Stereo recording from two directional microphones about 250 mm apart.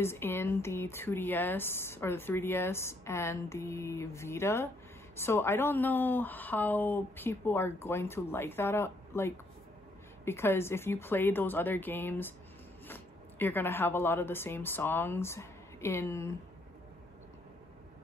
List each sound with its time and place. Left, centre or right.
0.0 s speech: centre